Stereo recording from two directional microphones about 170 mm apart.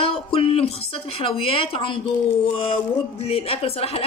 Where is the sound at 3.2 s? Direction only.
35° left (ahead or behind).